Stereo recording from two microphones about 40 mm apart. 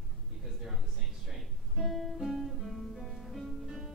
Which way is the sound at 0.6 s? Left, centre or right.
Centre.